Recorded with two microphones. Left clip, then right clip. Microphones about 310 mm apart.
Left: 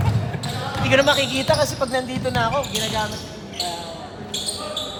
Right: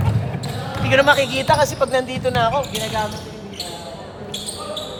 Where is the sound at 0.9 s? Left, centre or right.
Centre.